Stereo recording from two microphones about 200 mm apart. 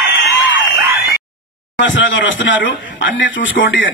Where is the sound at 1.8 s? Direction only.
70° left (ahead or behind).